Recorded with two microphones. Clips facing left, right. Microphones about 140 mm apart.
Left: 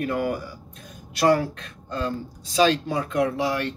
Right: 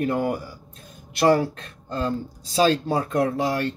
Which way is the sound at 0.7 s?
30° right (ahead or behind).